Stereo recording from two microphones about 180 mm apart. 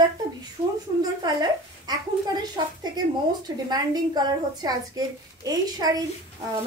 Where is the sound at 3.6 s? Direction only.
20° right (ahead or behind).